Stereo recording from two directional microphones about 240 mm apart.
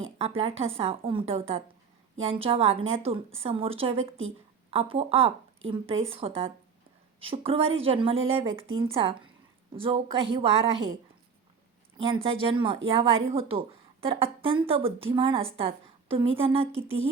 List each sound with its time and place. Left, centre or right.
0.2 s a woman's voice: right
11.9 s speech: right